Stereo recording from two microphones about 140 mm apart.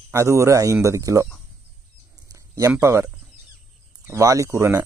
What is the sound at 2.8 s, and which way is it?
Speech, 20° right (ahead or behind).